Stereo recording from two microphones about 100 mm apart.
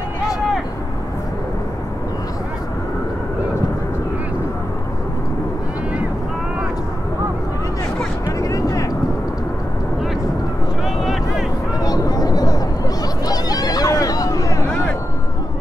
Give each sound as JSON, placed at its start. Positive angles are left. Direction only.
{"t": 8.3, "sound": "vehicle", "side_deg": 35}
{"t": 11.0, "sound": "vehicle", "side_deg": -5}
{"t": 11.8, "sound": "a sound", "side_deg": 40}